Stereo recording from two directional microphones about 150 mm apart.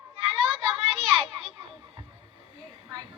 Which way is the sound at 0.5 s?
35° right (ahead or behind).